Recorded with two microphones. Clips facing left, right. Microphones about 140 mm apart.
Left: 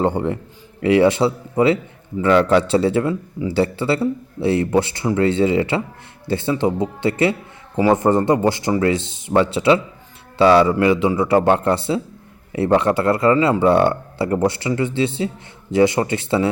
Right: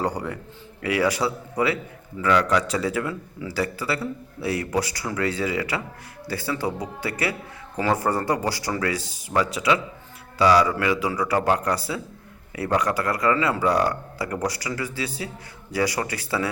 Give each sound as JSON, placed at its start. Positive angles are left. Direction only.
{"t": 0.0, "sound": "speech", "side_deg": 25}